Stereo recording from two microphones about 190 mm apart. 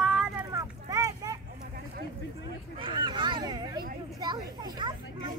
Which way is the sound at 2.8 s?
25° right (ahead or behind).